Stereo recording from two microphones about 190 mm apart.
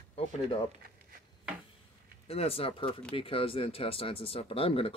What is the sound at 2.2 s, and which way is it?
Speech, 30° left (ahead or behind).